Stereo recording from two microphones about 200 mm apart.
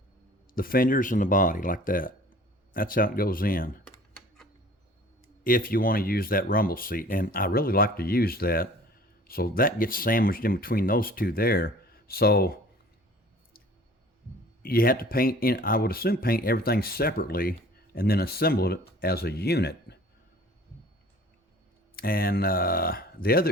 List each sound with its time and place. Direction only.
0.5 s speech: 45° left (ahead or behind)
5.4 s speech: 45° left (ahead or behind)
14.6 s speech: 45° left (ahead or behind)
21.9 s speech: 45° left (ahead or behind)